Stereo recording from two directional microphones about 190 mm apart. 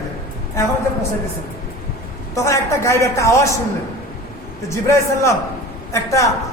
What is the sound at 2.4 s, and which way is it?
A woman's voice, 15° left (ahead or behind).